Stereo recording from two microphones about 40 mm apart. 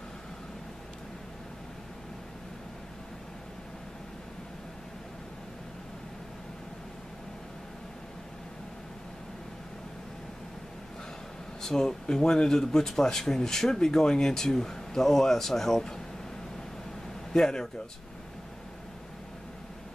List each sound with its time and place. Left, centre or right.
11.6 s speech: centre
17.3 s a man's voice: centre